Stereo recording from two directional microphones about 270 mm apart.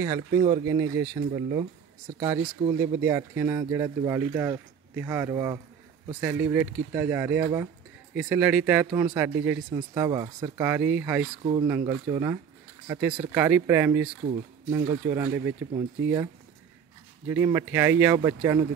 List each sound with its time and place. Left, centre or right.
0.0 s speech: centre
17.3 s speech: centre